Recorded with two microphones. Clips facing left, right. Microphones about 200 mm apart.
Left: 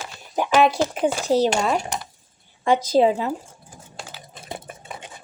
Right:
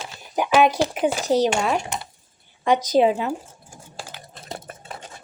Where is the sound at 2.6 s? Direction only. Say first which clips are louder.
Even; 30° left (ahead or behind).